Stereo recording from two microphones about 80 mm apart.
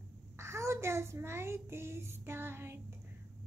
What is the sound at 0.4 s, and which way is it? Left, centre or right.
Child singing, right.